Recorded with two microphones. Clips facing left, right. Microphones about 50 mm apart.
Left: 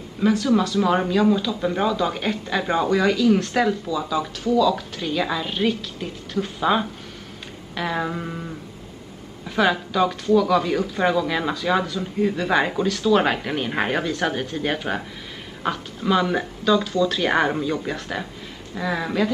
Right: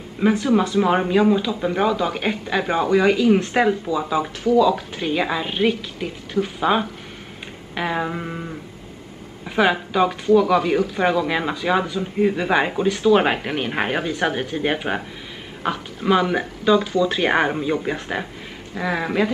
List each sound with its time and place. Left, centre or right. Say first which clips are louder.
0.2 s speech: right 1 dB; right
9.6 s speech: right 2 dB; centre